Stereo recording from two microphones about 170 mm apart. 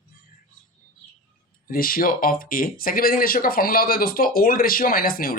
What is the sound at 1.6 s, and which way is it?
Speech, 55° left (ahead or behind).